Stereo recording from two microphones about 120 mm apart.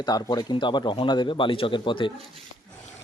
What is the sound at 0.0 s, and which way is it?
A man's voice, 35° left (ahead or behind).